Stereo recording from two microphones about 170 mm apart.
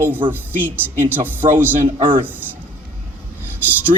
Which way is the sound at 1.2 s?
10° right (ahead or behind).